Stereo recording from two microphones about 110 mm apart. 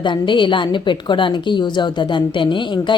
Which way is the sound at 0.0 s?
45° left (ahead or behind).